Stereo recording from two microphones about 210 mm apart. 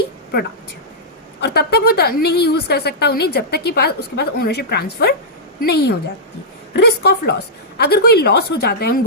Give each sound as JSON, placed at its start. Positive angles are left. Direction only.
{"t": 1.4, "sound": "a woman's voice", "side_deg": 50}